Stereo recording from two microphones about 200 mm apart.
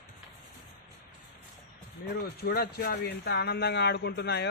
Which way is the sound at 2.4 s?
50° left (ahead or behind).